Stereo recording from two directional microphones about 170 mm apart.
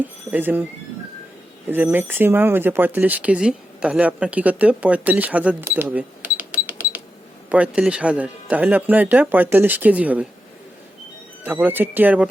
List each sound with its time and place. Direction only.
0.0 s speech: 10° right (ahead or behind)
1.7 s speech: 10° right (ahead or behind)
11.4 s speech: 10° right (ahead or behind)